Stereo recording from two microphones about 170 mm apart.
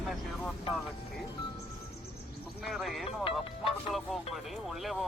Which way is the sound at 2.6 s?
Centre (ahead or behind).